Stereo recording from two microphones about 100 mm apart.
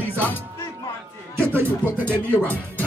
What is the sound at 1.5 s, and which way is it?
Speech, 20° right (ahead or behind).